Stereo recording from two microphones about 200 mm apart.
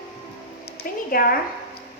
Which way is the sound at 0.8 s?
45° left (ahead or behind).